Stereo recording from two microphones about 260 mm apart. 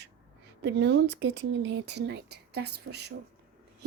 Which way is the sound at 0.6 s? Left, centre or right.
Right.